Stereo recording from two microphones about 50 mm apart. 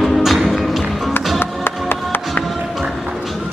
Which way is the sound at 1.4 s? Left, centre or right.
Left.